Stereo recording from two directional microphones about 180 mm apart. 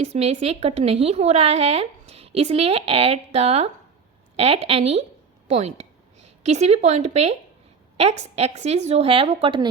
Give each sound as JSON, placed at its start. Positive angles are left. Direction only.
{"t": 0.0, "sound": "a woman's voice", "side_deg": -35}